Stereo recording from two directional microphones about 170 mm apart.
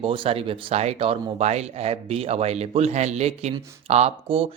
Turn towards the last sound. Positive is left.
turn(degrees=-35)  # may be behind; listen again after turning